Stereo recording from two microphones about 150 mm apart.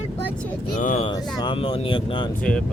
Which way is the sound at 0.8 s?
55° left (ahead or behind).